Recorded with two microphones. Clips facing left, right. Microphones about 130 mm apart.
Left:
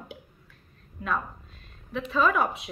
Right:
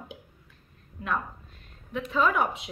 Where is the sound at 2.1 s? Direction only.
20° right (ahead or behind).